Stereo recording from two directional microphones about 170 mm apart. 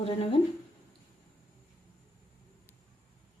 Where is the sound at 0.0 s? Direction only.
35° left (ahead or behind).